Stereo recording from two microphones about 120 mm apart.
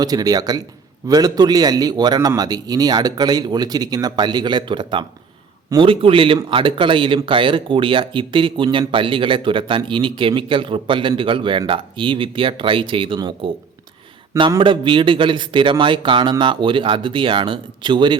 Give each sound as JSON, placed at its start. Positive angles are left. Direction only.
{"t": 0.0, "sound": "a man's voice", "side_deg": -30}
{"t": 14.6, "sound": "speech", "side_deg": -45}